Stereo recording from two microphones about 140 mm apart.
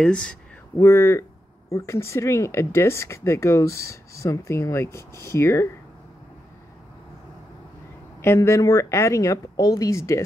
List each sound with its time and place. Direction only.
0.0 s speech: 5° left (ahead or behind)
0.7 s speech: 20° left (ahead or behind)
8.2 s speech: 20° left (ahead or behind)